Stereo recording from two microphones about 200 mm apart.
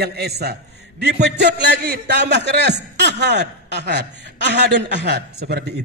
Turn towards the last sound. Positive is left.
turn(degrees=-55)  # may be behind; listen again after turning